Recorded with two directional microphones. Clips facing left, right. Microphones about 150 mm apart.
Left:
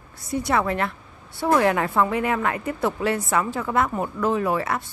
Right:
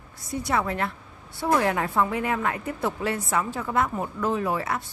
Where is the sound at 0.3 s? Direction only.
70° left (ahead or behind).